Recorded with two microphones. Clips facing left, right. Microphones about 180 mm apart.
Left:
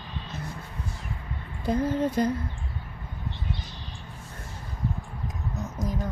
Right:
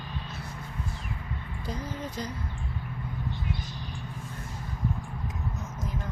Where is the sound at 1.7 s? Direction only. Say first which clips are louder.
Left 12 dB; 55° left (ahead or behind).